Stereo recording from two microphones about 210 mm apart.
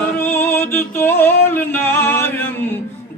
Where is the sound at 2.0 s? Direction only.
10° left (ahead or behind).